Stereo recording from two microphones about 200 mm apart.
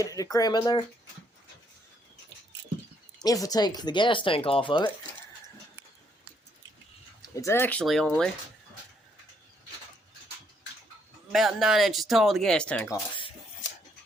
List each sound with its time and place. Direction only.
0.0 s speech: 15° left (ahead or behind)
3.2 s speech: 20° left (ahead or behind)
7.2 s speech: 15° left (ahead or behind)
11.3 s speech: centre (ahead or behind)
13.1 s cutlery: 25° left (ahead or behind)